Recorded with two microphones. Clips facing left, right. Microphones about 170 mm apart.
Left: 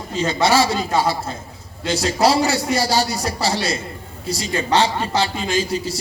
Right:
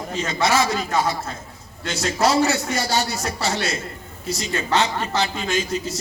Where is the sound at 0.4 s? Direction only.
30° left (ahead or behind).